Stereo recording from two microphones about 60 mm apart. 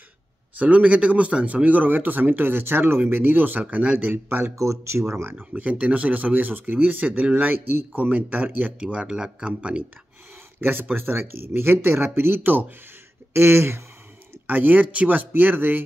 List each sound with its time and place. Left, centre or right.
0.6 s speech: right
4.6 s speech: right
5.5 s speech: right
8.8 s speech: centre
10.6 s speech: right
13.3 s speech: right
14.5 s speech: right